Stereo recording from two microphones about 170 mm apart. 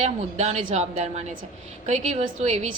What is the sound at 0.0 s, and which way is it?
A woman's voice, 40° right (ahead or behind).